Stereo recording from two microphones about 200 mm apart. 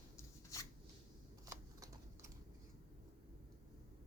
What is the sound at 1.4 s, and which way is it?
Typewriter, 15° right (ahead or behind).